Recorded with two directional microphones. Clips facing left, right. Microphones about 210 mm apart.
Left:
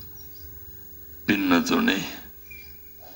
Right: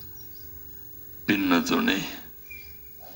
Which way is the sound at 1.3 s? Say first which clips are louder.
Left 2 dB; 50° left (ahead or behind).